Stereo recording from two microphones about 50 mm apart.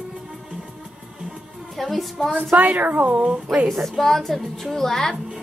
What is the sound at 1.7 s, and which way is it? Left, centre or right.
Speech, centre.